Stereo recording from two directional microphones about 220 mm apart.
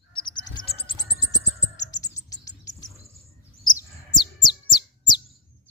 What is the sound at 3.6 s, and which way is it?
Chirp, 20° left (ahead or behind).